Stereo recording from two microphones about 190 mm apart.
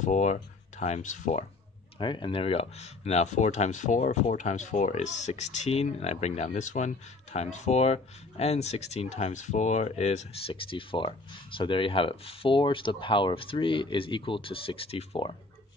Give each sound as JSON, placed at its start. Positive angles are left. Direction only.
{"t": 0.0, "sound": "speech", "side_deg": 40}
{"t": 2.0, "sound": "speech", "side_deg": 25}